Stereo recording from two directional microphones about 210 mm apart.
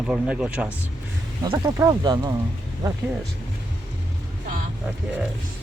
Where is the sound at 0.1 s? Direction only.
5° right (ahead or behind).